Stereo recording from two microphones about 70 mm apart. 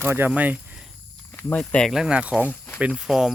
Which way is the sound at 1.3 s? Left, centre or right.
Left.